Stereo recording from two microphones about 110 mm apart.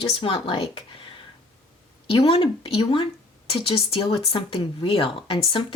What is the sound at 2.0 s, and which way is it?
Speech, 55° left (ahead or behind).